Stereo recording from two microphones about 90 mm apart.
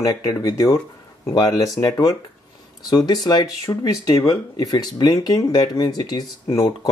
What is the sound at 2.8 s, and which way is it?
Speech, 50° left (ahead or behind).